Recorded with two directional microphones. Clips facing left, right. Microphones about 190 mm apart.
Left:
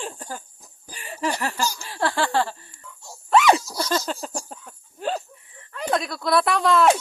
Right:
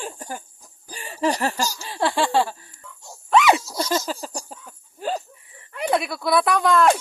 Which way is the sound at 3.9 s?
5° right (ahead or behind).